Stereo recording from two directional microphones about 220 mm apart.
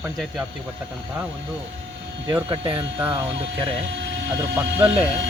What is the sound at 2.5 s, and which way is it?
Speech, 25° right (ahead or behind).